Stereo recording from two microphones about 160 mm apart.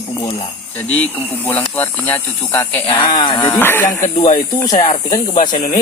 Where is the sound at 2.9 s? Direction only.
30° left (ahead or behind).